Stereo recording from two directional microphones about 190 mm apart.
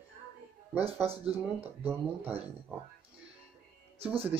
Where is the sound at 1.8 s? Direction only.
10° right (ahead or behind).